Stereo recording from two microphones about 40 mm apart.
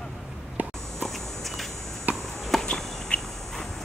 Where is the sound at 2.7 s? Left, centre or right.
Centre.